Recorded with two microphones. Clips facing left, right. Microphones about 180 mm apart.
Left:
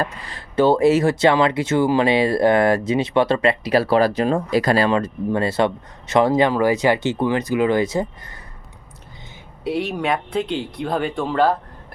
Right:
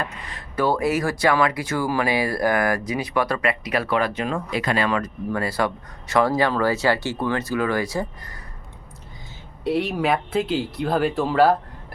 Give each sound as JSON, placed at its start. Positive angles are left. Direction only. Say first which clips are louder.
{"t": 0.0, "sound": "speech", "louder": "left 5 dB", "side_deg": 30}
{"t": 9.6, "sound": "speech", "louder": "even", "side_deg": 0}